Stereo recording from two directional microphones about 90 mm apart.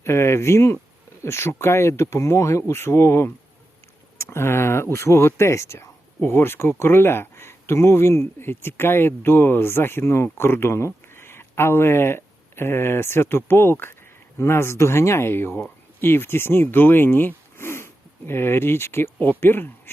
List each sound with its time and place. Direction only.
0.0 s speech: 30° left (ahead or behind)